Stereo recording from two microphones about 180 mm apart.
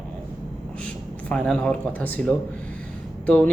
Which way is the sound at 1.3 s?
5° left (ahead or behind).